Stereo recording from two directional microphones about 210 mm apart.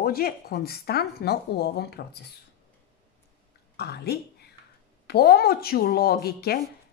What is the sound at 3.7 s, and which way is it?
Speech, 50° left (ahead or behind).